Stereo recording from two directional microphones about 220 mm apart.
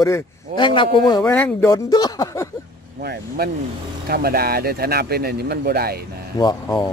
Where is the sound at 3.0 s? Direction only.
45° right (ahead or behind).